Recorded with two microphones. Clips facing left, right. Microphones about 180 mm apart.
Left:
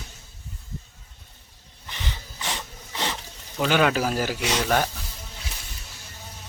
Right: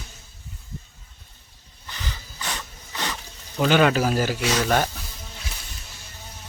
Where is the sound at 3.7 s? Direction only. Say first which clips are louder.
Right 3 dB; 5° left (ahead or behind).